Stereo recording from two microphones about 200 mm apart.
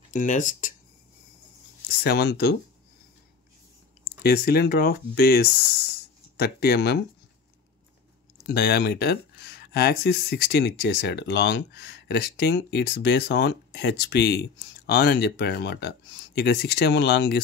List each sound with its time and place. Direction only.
0.1 s speech: 40° left (ahead or behind)
2.0 s speech: 50° left (ahead or behind)
4.2 s speech: 50° left (ahead or behind)
8.5 s speech: 50° left (ahead or behind)